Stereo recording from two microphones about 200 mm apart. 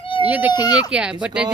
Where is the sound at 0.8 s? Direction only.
5° right (ahead or behind).